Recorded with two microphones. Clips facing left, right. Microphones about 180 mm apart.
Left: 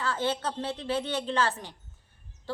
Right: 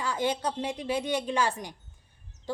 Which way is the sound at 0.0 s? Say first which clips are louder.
Right 1 dB; 15° right (ahead or behind).